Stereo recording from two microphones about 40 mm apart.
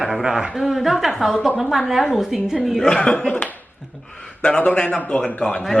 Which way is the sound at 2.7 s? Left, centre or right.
Centre.